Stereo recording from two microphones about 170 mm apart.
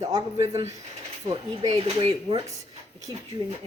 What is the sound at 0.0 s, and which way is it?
Speech, 20° right (ahead or behind).